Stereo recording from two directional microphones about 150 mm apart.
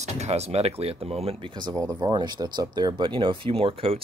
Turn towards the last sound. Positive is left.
turn(degrees=-40)  # may be behind; listen again after turning